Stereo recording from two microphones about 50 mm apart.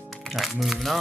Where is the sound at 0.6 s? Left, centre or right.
Centre.